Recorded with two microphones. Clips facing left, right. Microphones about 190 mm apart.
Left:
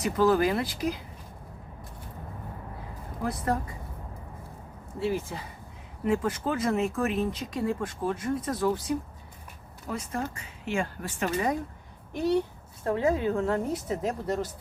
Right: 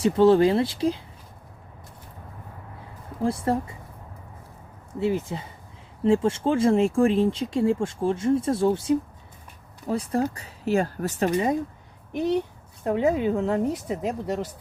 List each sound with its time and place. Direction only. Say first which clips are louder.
0.0 s speech: right 6 dB; 30° right (ahead or behind)
3.2 s speech: right 5 dB; 30° right (ahead or behind)
4.9 s speech: right 4 dB; 20° right (ahead or behind); by 11.3 s 40° right (ahead or behind)
12.8 s speech: right 3 dB; 20° right (ahead or behind)